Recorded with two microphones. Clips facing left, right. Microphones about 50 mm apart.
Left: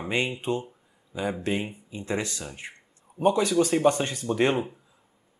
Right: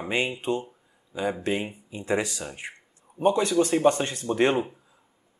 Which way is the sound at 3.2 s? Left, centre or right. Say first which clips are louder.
Even; centre.